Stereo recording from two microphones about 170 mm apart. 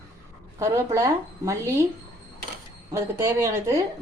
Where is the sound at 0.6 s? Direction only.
20° right (ahead or behind).